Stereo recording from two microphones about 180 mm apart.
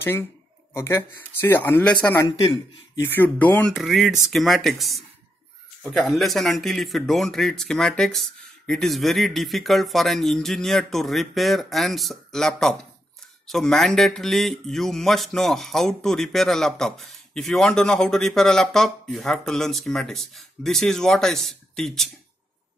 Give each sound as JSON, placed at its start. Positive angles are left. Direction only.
{"t": 0.0, "sound": "speech", "side_deg": 15}
{"t": 2.2, "sound": "speech", "side_deg": 20}
{"t": 3.1, "sound": "speech", "side_deg": 10}